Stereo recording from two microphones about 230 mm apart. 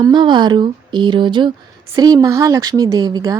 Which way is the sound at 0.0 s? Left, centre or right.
Centre.